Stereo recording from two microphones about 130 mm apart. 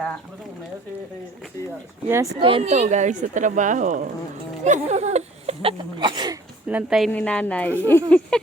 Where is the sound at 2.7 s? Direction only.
65° right (ahead or behind).